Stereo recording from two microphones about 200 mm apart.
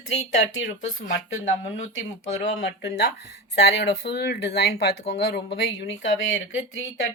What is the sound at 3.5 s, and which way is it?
Speech, 55° left (ahead or behind).